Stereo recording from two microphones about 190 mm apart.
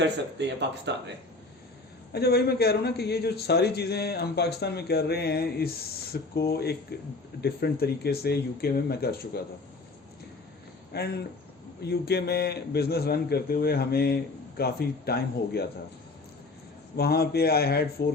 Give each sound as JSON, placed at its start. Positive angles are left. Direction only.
{"t": 0.0, "sound": "speech", "side_deg": -65}
{"t": 2.1, "sound": "speech", "side_deg": 55}
{"t": 10.9, "sound": "speech", "side_deg": 55}
{"t": 17.0, "sound": "speech", "side_deg": 55}